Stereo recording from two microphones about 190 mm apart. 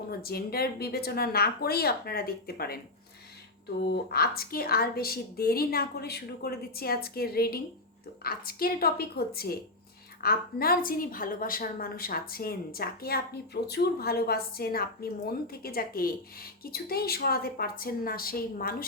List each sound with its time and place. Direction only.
0.1 s a woman's voice: 55° left (ahead or behind)
3.8 s a woman's voice: 55° left (ahead or behind)